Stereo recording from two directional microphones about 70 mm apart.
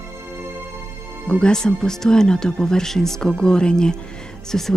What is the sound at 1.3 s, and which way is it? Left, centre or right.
Speech, centre.